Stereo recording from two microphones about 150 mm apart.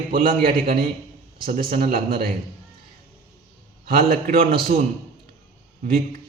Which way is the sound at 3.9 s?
70° right (ahead or behind).